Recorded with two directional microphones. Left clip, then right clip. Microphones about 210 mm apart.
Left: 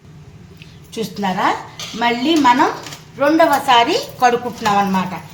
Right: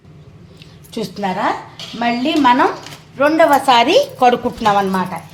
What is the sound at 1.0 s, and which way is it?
Speech, 30° right (ahead or behind).